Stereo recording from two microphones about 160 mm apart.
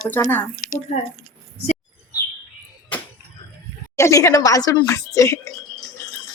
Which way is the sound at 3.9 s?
20° left (ahead or behind).